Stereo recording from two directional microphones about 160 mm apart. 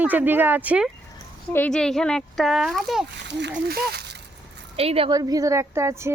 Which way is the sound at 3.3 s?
90° right.